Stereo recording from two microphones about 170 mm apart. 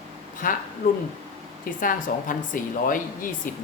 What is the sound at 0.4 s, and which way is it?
Speech, 55° left (ahead or behind).